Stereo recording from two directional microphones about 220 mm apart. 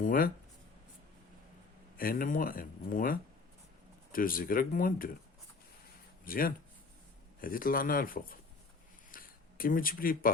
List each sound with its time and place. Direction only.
0.0 s speech: 40° left (ahead or behind)
2.0 s speech: 40° left (ahead or behind)
6.2 s speech: 40° left (ahead or behind)